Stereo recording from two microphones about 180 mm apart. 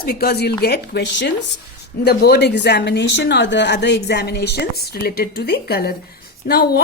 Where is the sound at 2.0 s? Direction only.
60° left (ahead or behind).